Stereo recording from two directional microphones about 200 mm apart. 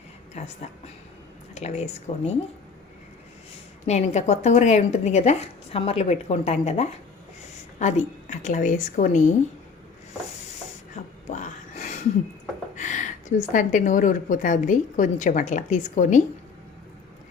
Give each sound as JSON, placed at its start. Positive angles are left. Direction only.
{"t": 0.4, "sound": "speech", "side_deg": 35}
{"t": 1.5, "sound": "speech", "side_deg": 35}
{"t": 3.8, "sound": "speech", "side_deg": 35}
{"t": 10.9, "sound": "a sound", "side_deg": 35}
{"t": 12.7, "sound": "speech", "side_deg": 40}